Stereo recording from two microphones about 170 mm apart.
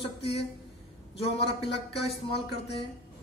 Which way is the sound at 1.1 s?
35° left (ahead or behind).